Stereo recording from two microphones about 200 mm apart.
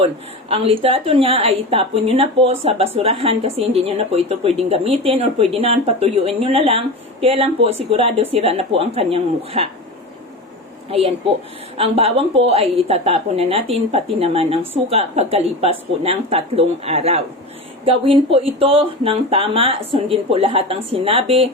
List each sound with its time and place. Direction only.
0.0 s a woman's voice: 30° right (ahead or behind)
11.8 s a woman's voice: 30° right (ahead or behind)